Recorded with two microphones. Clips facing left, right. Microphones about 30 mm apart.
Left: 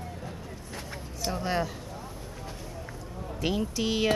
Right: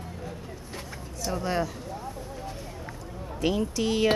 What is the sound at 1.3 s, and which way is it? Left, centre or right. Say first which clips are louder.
Speech: right 1 dB; centre.